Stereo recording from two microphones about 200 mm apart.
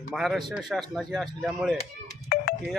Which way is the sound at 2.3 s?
50° left (ahead or behind).